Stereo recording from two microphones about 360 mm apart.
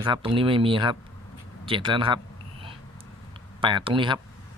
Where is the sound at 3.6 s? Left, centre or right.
Centre.